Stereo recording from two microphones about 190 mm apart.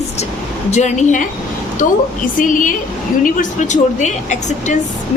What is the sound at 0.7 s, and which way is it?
A woman's voice, 40° left (ahead or behind).